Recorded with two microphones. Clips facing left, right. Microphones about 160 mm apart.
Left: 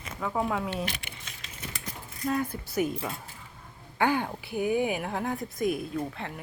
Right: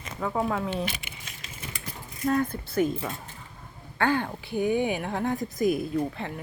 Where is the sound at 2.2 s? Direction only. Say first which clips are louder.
Right 4 dB; 5° left (ahead or behind).